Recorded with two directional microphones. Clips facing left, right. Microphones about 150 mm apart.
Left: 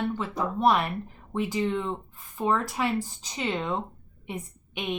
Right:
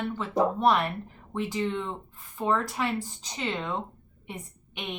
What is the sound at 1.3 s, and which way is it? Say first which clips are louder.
Speech: left 2 dB; 10° left (ahead or behind).